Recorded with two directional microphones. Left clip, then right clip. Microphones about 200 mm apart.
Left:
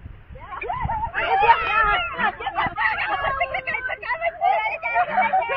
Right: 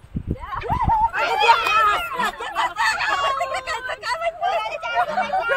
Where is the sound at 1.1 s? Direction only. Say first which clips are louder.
Left 4 dB; 65° right (ahead or behind).